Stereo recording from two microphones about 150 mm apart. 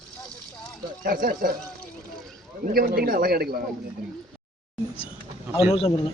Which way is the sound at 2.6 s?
75° right (ahead or behind).